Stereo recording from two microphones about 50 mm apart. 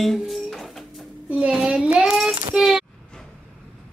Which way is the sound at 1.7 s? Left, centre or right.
Centre.